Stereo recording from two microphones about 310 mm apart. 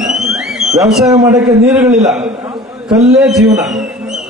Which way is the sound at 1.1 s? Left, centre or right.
Centre.